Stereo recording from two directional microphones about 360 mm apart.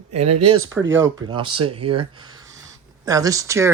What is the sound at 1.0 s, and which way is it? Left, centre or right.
Speech, centre.